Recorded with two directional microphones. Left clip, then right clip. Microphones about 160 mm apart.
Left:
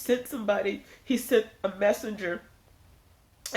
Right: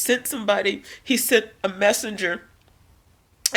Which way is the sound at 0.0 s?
15° right (ahead or behind).